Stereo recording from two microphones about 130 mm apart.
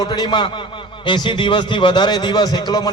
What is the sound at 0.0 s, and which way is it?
A man's voice, 35° left (ahead or behind).